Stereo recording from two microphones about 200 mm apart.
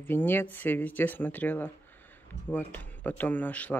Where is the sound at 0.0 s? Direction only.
10° left (ahead or behind).